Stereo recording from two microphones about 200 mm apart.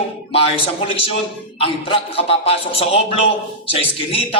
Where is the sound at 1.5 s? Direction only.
25° left (ahead or behind).